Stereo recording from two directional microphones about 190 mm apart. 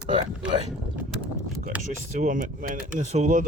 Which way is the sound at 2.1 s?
40° right (ahead or behind).